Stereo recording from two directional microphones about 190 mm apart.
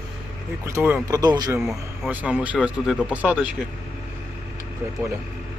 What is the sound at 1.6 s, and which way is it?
Speech, 5° right (ahead or behind).